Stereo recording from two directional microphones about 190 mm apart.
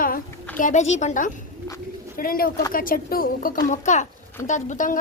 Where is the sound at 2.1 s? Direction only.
50° left (ahead or behind).